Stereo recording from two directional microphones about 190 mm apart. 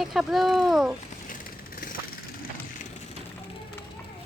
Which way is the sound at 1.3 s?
45° left (ahead or behind).